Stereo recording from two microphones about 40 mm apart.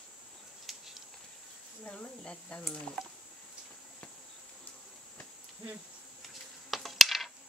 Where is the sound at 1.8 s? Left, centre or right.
Left.